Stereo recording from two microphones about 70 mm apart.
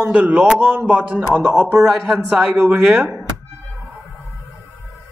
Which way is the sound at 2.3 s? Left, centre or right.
Centre.